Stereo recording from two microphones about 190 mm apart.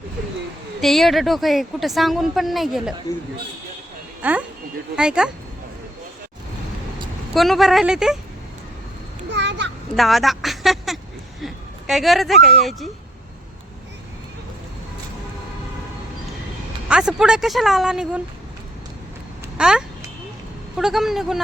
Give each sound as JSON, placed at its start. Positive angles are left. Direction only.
{"t": 0.8, "sound": "a woman's voice", "side_deg": 0}
{"t": 4.2, "sound": "a woman's voice", "side_deg": -10}
{"t": 7.3, "sound": "a woman's voice", "side_deg": 0}
{"t": 9.3, "sound": "children playing", "side_deg": -65}
{"t": 9.9, "sound": "speech", "side_deg": 0}
{"t": 16.9, "sound": "a woman's voice", "side_deg": -5}
{"t": 19.5, "sound": "a woman's voice", "side_deg": -5}